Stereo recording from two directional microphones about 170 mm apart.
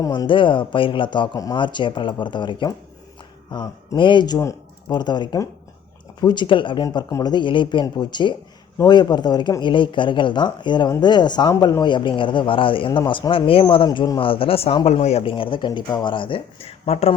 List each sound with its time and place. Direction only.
0.0 s speech: 25° left (ahead or behind)